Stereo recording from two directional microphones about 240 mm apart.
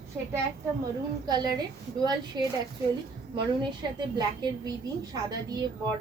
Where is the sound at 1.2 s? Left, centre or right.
Centre.